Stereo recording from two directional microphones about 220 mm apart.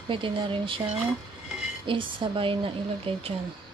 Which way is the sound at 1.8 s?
25° right (ahead or behind).